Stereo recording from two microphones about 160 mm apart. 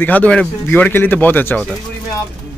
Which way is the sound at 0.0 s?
10° left (ahead or behind).